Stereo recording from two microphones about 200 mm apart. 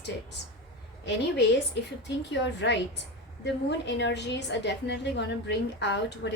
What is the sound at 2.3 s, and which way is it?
Speech, 60° left (ahead or behind).